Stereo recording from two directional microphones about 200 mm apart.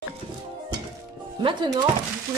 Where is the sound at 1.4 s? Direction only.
25° right (ahead or behind).